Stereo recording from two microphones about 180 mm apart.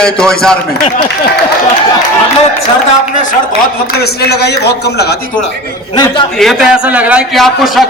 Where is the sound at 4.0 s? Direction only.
65° left (ahead or behind).